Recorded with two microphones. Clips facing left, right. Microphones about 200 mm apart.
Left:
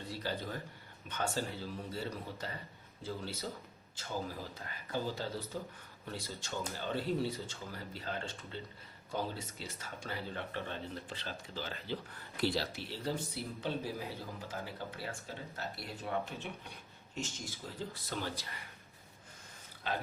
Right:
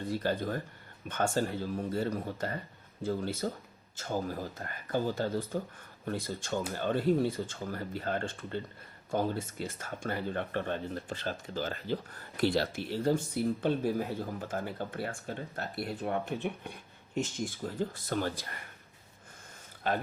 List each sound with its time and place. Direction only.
0.0 s speech: 50° right (ahead or behind)
19.9 s speech: 50° right (ahead or behind)